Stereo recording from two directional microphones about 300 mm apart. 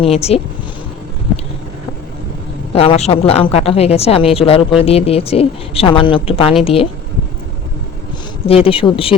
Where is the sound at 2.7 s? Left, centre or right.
Centre.